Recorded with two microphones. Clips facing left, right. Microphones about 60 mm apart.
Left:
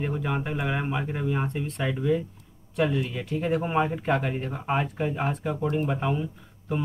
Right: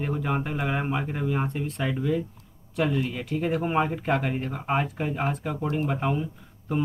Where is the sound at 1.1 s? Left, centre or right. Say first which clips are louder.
Even; right.